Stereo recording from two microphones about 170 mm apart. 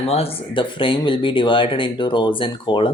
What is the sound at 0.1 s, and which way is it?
Speech, 35° left (ahead or behind).